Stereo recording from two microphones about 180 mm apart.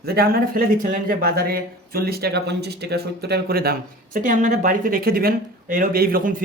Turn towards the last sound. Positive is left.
turn(degrees=-55)  # may be behind; listen again after turning